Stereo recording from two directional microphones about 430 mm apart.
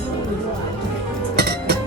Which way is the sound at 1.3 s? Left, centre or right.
Right.